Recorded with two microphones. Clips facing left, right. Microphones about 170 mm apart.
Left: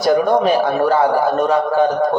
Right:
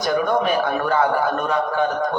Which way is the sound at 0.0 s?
40° left (ahead or behind).